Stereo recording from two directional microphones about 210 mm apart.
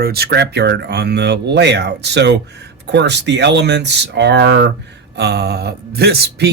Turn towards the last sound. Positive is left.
turn(degrees=-50)  # may be behind; listen again after turning